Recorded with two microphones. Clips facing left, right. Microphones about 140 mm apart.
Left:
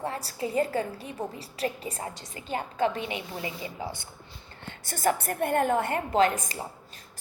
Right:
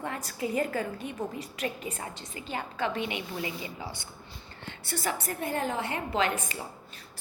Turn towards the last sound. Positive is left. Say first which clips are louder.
# left 5 dB
turn(degrees=40)  # may be behind; listen again after turning